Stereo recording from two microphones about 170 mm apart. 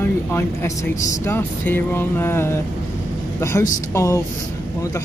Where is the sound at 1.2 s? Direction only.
10° left (ahead or behind).